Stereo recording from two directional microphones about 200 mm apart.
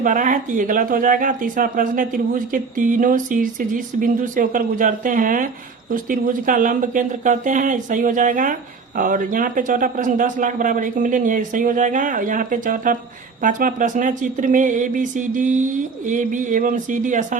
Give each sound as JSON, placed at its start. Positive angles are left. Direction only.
{"t": 0.0, "sound": "speech", "side_deg": -40}